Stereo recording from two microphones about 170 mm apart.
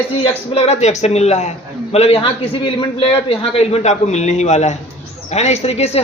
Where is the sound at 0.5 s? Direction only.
40° left (ahead or behind).